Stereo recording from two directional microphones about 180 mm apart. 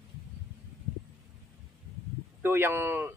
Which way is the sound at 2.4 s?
10° right (ahead or behind).